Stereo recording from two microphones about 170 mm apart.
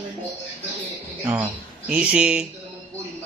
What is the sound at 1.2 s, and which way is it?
Speech, 20° right (ahead or behind).